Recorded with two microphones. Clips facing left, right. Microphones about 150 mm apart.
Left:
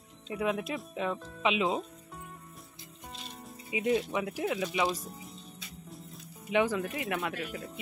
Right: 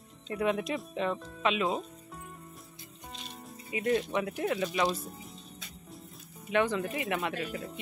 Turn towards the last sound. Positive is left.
turn(degrees=0)  # may be behind; listen again after turning